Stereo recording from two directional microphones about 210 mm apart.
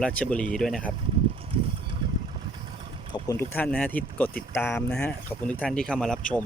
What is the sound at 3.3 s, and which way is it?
Speech, 10° left (ahead or behind).